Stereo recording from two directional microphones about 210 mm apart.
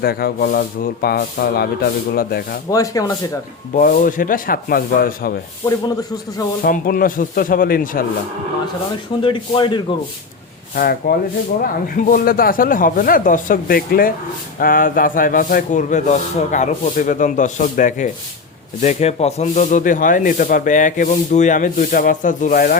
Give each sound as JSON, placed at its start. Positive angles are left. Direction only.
{"t": 0.0, "sound": "speech", "side_deg": 45}
{"t": 2.6, "sound": "speech", "side_deg": 15}
{"t": 3.8, "sound": "speech", "side_deg": 40}
{"t": 5.6, "sound": "speech", "side_deg": 15}
{"t": 6.6, "sound": "speech", "side_deg": 45}
{"t": 9.2, "sound": "speech", "side_deg": 25}
{"t": 10.8, "sound": "speech", "side_deg": 45}